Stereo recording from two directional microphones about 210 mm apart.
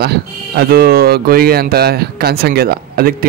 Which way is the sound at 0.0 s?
50° right (ahead or behind).